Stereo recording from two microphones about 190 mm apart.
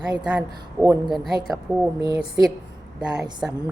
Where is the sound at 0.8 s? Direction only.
20° right (ahead or behind).